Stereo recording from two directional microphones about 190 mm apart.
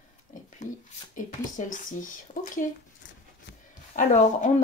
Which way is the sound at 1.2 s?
40° left (ahead or behind).